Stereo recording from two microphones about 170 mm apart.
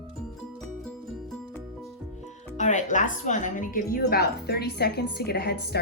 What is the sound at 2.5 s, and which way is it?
Speech, 45° left (ahead or behind).